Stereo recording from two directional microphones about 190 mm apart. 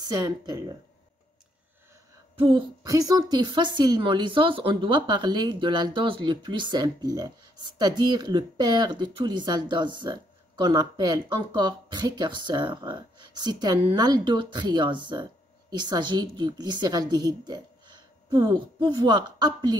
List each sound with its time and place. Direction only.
0.0 s a woman's voice: 20° right (ahead or behind)
2.3 s a woman's voice: 25° right (ahead or behind)